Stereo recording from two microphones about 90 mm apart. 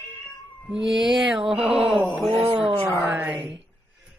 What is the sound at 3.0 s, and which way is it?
Speech, 15° right (ahead or behind).